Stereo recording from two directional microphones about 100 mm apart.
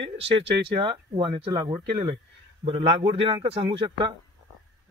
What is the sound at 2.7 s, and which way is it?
Speech, 65° right (ahead or behind).